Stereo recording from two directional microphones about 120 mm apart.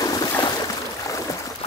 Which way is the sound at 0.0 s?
35° left (ahead or behind).